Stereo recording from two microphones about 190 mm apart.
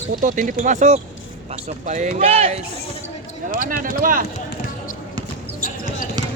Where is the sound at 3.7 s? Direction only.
45° right (ahead or behind).